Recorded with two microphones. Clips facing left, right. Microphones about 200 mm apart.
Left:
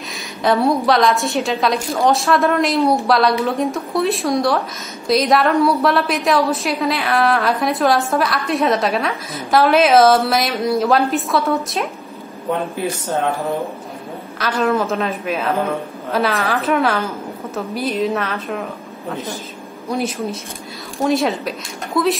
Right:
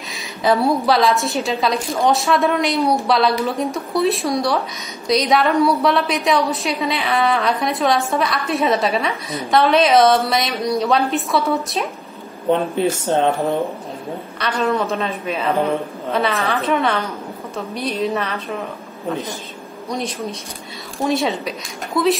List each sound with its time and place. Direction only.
0.1 s a woman's voice: centre (ahead or behind)
12.4 s a woman's voice: 25° right (ahead or behind)
14.6 s a woman's voice: centre (ahead or behind)
19.9 s a woman's voice: 5° left (ahead or behind)